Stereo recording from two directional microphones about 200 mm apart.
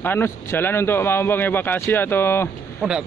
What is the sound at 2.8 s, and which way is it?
Speech, 5° right (ahead or behind).